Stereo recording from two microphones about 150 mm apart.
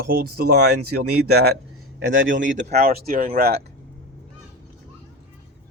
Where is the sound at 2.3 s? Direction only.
55° right (ahead or behind).